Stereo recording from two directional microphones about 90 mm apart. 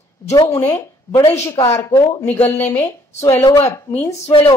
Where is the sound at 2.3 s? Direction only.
20° left (ahead or behind).